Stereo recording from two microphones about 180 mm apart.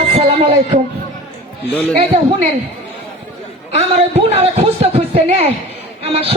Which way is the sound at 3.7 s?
35° right (ahead or behind).